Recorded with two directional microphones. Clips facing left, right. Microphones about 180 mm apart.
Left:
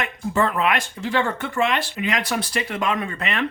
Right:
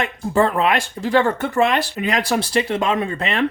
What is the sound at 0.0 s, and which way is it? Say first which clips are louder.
Speech: right 4 dB; 35° right (ahead or behind).